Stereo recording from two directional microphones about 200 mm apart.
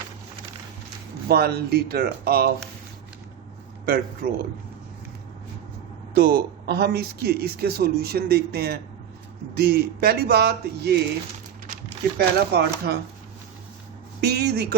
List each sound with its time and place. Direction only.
1.3 s speech: 50° right (ahead or behind)
3.8 s speech: 45° right (ahead or behind)
6.1 s speech: 50° right (ahead or behind)
12.1 s speech: 50° right (ahead or behind)
14.2 s speech: 55° right (ahead or behind)